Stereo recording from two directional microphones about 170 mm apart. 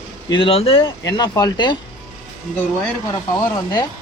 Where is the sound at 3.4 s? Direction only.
20° left (ahead or behind).